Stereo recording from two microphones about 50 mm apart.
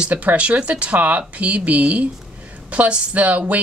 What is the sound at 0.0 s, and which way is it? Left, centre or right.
A woman's voice, right.